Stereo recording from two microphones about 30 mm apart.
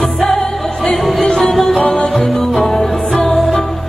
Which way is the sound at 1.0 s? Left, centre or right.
Centre.